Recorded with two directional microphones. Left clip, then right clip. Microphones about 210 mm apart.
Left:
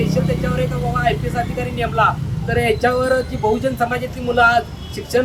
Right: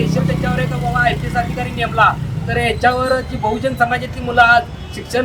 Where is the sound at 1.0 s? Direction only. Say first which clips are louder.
Right 3 dB; 5° right (ahead or behind).